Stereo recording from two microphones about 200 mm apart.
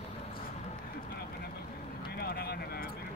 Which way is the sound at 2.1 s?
50° left (ahead or behind).